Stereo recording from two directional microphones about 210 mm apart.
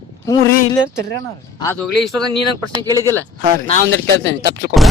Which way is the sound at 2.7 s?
20° right (ahead or behind).